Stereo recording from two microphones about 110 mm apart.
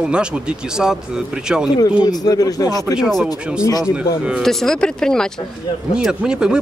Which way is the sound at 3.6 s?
30° left (ahead or behind).